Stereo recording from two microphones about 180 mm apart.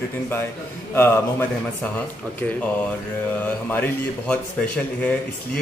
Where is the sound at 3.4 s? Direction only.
10° left (ahead or behind).